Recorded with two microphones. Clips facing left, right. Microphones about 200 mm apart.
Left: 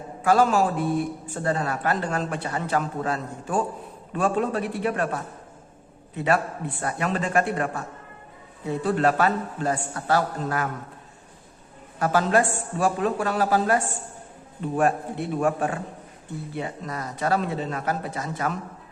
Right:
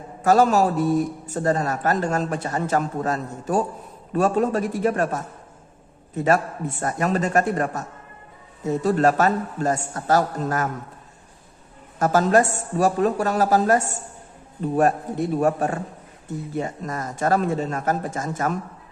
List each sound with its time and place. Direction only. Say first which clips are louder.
0.2 s a man's voice: right 3 dB; 40° right (ahead or behind)
11.9 s a man's voice: right 3 dB; 45° right (ahead or behind)